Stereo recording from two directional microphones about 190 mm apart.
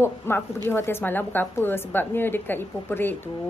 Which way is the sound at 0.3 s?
15° left (ahead or behind).